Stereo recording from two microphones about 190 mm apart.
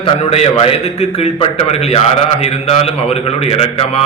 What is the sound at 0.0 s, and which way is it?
A man's voice, 35° left (ahead or behind).